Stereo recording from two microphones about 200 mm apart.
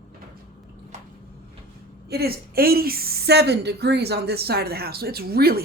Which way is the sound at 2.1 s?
50° right (ahead or behind).